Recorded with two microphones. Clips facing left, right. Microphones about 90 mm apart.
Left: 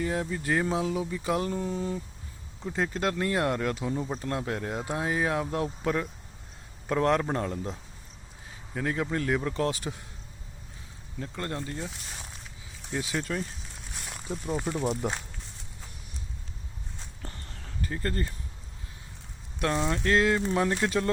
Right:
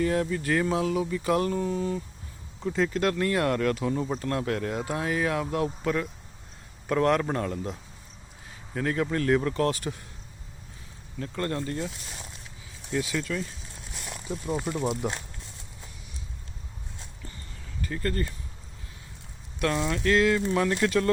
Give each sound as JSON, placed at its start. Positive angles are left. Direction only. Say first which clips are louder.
{"t": 0.0, "sound": "speech", "louder": "right 4 dB", "side_deg": 15}
{"t": 8.7, "sound": "speech", "louder": "right 2 dB", "side_deg": 10}
{"t": 11.2, "sound": "speech", "louder": "right 4 dB", "side_deg": 15}
{"t": 12.9, "sound": "speech", "louder": "right 2 dB", "side_deg": 25}
{"t": 17.2, "sound": "a sound", "louder": "left 3 dB", "side_deg": 70}
{"t": 17.8, "sound": "speech", "louder": "right 2 dB", "side_deg": 25}
{"t": 19.5, "sound": "speech", "louder": "right 1 dB", "side_deg": 25}